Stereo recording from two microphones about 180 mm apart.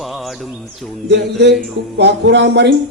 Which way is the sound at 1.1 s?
70° right (ahead or behind).